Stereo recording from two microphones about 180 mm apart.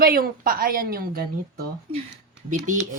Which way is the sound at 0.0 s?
55° right (ahead or behind).